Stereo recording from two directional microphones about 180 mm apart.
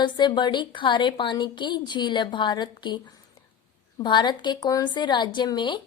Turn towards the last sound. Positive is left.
turn(degrees=25)  # may be behind; listen again after turning